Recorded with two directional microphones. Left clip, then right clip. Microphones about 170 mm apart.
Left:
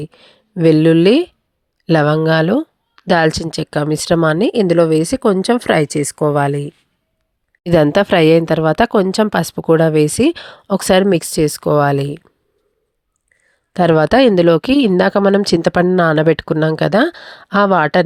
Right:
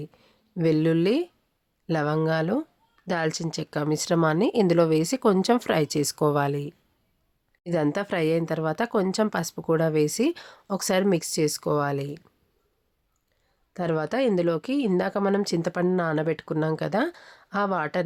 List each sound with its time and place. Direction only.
0.0 s speech: 45° left (ahead or behind)
7.6 s a woman's voice: 55° left (ahead or behind)
13.7 s speech: 55° left (ahead or behind)